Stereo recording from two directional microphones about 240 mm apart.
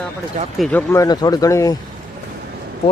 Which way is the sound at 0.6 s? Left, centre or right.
Centre.